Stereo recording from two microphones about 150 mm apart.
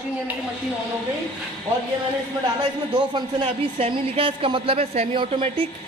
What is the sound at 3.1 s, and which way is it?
A man's voice, 40° right (ahead or behind).